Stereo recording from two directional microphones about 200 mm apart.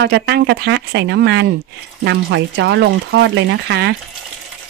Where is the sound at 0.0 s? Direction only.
60° right (ahead or behind).